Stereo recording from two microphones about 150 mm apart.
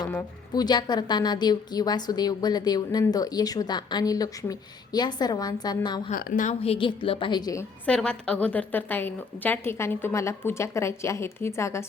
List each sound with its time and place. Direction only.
0.5 s a woman's voice: 30° left (ahead or behind)
6.1 s a woman's voice: 65° left (ahead or behind)
6.6 s a woman's voice: 40° left (ahead or behind); by 7.7 s 25° left (ahead or behind)
7.9 s a woman's voice: 5° left (ahead or behind)